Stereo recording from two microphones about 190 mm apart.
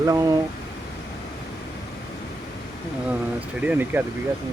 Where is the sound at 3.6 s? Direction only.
10° right (ahead or behind).